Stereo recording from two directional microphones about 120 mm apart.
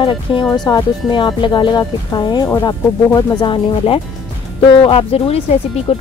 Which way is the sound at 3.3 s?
45° left (ahead or behind).